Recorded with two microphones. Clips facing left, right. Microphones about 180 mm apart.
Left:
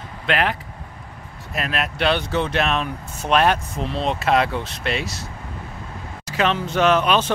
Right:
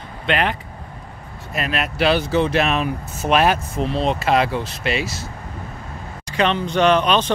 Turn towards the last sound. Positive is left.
turn(degrees=5)  # may be behind; listen again after turning